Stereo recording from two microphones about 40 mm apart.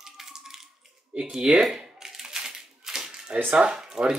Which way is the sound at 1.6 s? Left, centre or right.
Centre.